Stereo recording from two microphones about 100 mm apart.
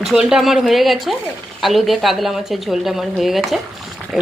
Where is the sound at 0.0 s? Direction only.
5° right (ahead or behind).